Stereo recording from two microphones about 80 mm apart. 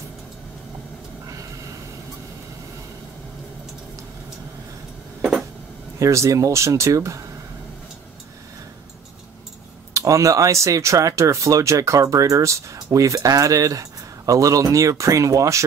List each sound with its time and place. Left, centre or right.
5.9 s speech: right
9.9 s speech: right